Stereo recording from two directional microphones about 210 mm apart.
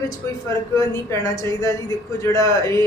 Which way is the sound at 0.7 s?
15° left (ahead or behind).